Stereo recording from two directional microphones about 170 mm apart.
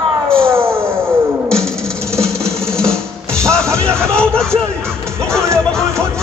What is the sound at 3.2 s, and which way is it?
Music, 15° right (ahead or behind).